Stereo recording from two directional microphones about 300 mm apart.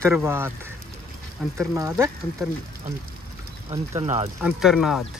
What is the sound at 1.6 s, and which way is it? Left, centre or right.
Speech, centre.